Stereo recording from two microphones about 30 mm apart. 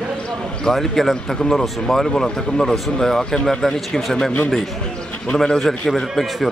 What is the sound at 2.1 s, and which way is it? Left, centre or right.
Speech, centre.